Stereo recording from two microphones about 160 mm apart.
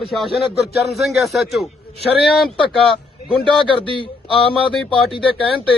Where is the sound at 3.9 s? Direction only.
30° left (ahead or behind).